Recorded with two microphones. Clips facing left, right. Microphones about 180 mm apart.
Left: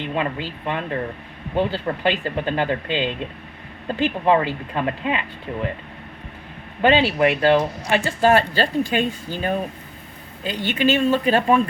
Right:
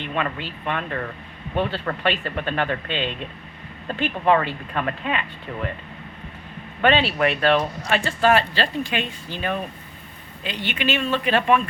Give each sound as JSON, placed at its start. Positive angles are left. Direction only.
{"t": 0.1, "sound": "speech", "side_deg": 20}
{"t": 6.8, "sound": "speech", "side_deg": 20}
{"t": 8.3, "sound": "speech", "side_deg": 40}